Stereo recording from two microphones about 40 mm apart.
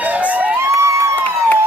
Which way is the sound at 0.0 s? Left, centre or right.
Right.